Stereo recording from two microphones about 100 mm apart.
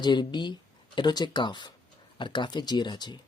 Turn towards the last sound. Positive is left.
turn(degrees=45)  # may be behind; listen again after turning